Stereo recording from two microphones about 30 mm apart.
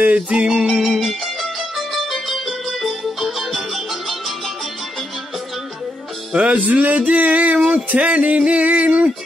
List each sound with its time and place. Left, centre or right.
0.0 s music: right
0.5 s music: right
1.2 s music: centre
6.5 s a sound: right
7.6 s music: right